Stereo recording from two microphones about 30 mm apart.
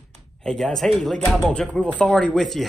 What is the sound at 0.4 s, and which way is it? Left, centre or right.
Speech, centre.